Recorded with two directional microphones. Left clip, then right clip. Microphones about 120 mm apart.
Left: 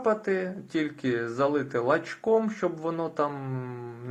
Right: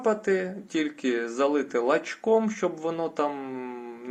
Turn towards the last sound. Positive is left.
turn(degrees=-20)  # may be behind; listen again after turning